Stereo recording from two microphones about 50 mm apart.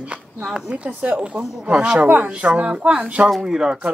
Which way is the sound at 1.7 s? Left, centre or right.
Right.